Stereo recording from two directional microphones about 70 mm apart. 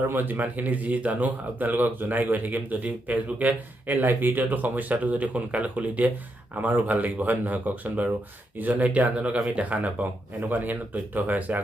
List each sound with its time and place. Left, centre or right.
0.1 s speech: right